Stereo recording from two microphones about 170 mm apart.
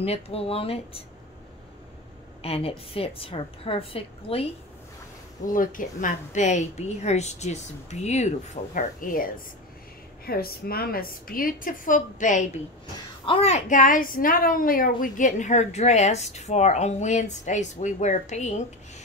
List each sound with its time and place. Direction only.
0.0 s a woman's voice: 35° left (ahead or behind)
2.4 s a woman's voice: 35° left (ahead or behind)
5.5 s a woman's voice: 50° left (ahead or behind)
8.7 s a woman's voice: 55° left (ahead or behind)
13.2 s a woman's voice: 35° left (ahead or behind)